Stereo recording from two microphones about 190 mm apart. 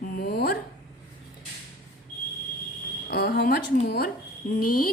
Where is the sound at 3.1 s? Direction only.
55° left (ahead or behind).